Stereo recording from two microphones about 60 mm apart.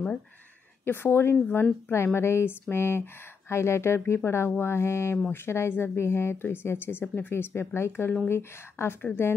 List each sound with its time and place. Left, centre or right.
0.8 s speech: left
2.1 s mantra: left
5.3 s speech: left